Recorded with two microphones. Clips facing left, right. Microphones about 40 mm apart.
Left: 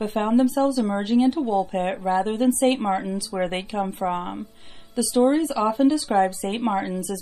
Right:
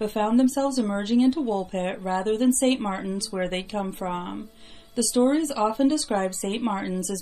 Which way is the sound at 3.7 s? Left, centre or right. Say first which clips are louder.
Left 4 dB; centre.